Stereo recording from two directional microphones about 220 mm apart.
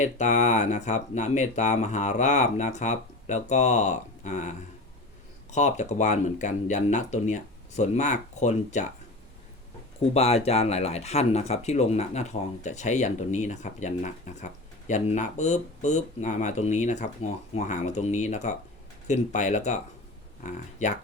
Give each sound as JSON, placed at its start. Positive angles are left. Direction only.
{"t": 0.0, "sound": "speech", "side_deg": 35}
{"t": 10.2, "sound": "speech", "side_deg": 30}